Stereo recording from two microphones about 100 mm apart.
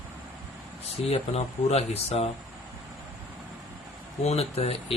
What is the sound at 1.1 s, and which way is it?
Speech, 90° left.